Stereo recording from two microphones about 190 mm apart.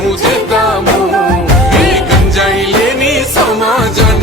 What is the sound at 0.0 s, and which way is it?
Music, centre (ahead or behind).